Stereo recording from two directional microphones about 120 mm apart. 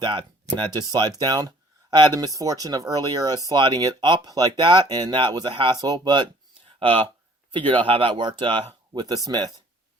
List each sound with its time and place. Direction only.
0.0 s speech: 40° right (ahead or behind)
6.7 s speech: 50° right (ahead or behind); by 9.5 s 35° right (ahead or behind)